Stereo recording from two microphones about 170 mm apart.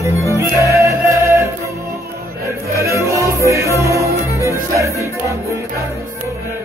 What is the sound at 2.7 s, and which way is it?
Music, 15° right (ahead or behind).